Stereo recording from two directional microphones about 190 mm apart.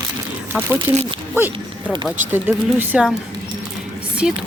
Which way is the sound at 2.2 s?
10° right (ahead or behind).